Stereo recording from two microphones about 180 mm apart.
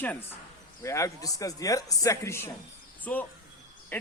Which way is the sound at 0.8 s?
15° left (ahead or behind).